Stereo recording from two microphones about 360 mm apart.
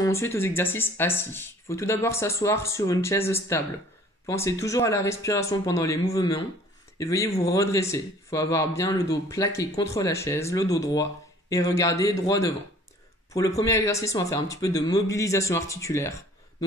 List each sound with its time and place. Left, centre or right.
0.0 s speech: centre